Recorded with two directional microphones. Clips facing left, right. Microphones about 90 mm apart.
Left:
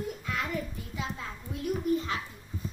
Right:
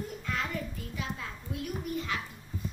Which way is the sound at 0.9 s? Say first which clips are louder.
Left 2 dB; 30° left (ahead or behind).